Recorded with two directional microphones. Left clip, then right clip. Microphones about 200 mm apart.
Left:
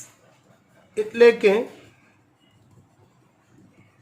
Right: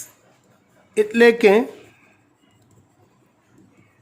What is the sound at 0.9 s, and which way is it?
Speech, 55° right (ahead or behind).